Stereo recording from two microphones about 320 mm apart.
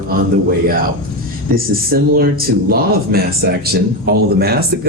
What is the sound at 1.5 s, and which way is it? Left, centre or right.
Speech, right.